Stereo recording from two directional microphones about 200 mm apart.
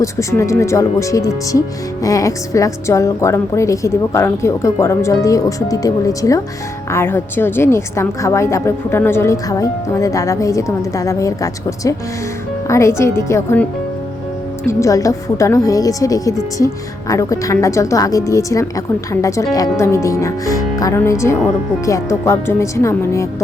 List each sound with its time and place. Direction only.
0.0 s a woman's voice: 15° left (ahead or behind)
14.7 s a woman's voice: 15° left (ahead or behind)